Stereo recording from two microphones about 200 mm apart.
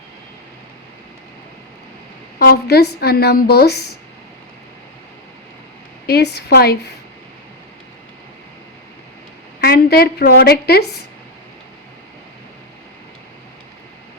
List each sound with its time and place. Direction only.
2.4 s a woman's voice: 50° left (ahead or behind)
6.1 s a woman's voice: 55° left (ahead or behind)
9.6 s a woman's voice: 50° left (ahead or behind)